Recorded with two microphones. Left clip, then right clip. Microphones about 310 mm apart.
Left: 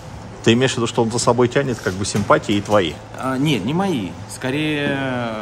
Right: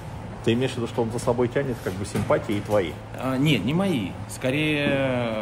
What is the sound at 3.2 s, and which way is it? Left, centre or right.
Speech, centre.